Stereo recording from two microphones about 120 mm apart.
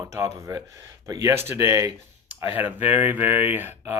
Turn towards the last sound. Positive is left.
turn(degrees=-15)  # may be behind; listen again after turning